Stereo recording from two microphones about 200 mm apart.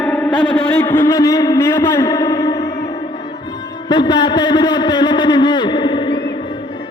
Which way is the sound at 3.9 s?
20° left (ahead or behind).